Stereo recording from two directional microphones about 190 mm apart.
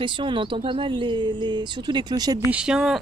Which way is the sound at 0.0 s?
25° right (ahead or behind).